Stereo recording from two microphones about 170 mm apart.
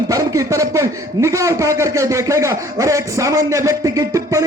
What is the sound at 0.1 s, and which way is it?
A man's voice, 20° right (ahead or behind).